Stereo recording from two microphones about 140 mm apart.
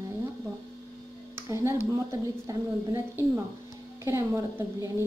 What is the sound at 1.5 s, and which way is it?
A woman's voice, 20° right (ahead or behind).